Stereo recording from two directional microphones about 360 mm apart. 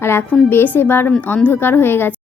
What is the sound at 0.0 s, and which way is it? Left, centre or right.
A woman's voice, centre.